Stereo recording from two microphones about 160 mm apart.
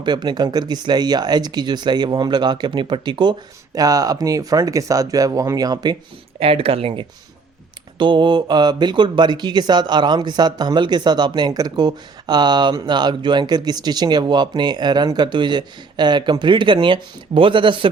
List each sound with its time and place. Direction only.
0.0 s speech: 25° right (ahead or behind)
6.4 s speech: 35° right (ahead or behind)